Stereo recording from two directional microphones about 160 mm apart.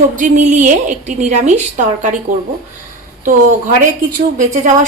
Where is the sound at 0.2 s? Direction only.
50° right (ahead or behind).